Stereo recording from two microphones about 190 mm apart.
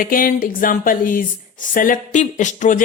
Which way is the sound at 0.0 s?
50° left (ahead or behind).